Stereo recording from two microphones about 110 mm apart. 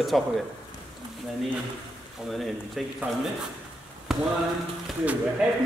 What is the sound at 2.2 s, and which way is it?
Speech, centre (ahead or behind).